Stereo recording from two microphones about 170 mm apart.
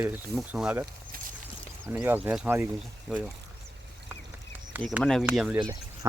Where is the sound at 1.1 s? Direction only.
55° right (ahead or behind).